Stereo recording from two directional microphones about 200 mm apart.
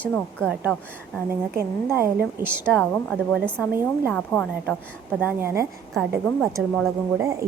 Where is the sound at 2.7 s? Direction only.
5° left (ahead or behind).